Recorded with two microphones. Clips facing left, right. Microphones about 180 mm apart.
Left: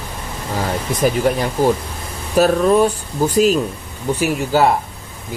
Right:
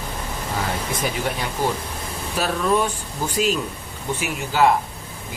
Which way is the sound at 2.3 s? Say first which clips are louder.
Left 8 dB; 40° left (ahead or behind).